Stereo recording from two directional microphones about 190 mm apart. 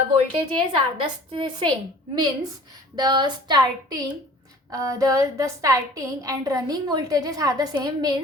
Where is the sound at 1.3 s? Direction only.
25° right (ahead or behind).